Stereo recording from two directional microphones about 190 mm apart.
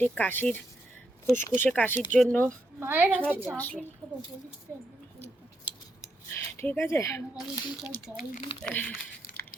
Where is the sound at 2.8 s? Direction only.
10° right (ahead or behind).